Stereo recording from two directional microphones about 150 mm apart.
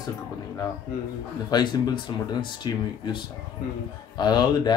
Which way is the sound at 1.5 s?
30° left (ahead or behind).